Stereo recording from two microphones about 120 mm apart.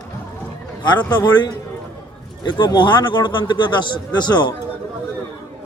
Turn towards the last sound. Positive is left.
turn(degrees=40)  # may be behind; listen again after turning